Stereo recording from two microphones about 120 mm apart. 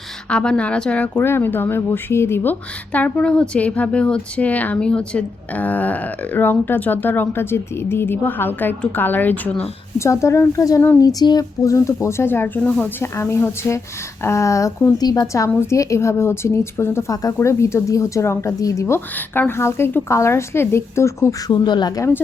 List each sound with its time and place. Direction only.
0.3 s speech: 10° left (ahead or behind); by 22.1 s 30° left (ahead or behind)